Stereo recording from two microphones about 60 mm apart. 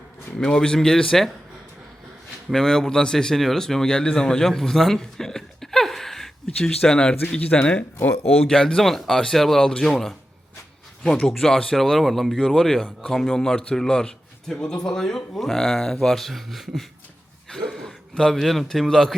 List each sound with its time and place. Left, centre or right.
0.3 s speech: centre
2.5 s speech: centre
11.0 s speech: centre
17.5 s a sound: centre
18.1 s speech: centre